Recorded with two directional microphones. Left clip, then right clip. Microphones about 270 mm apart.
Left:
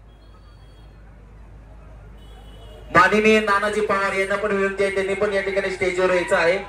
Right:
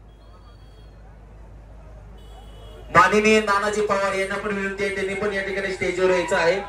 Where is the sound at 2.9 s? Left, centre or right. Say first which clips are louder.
Left 1 dB; right.